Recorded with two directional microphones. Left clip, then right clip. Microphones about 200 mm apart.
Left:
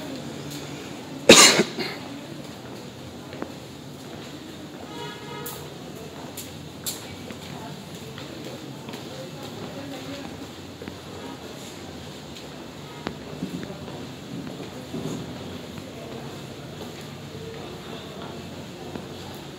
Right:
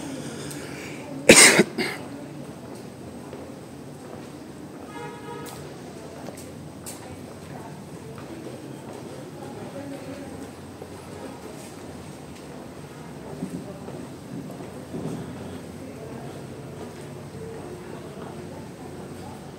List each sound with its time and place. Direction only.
1.2 s cough: 35° right (ahead or behind)